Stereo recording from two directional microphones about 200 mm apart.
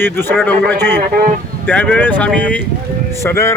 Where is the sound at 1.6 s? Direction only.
5° left (ahead or behind).